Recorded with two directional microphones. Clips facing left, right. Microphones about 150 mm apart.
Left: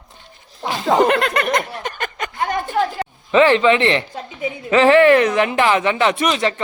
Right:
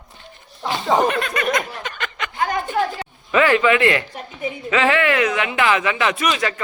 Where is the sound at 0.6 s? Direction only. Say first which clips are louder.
Left 2 dB; 80° left; by 2.3 s 40° left (ahead or behind).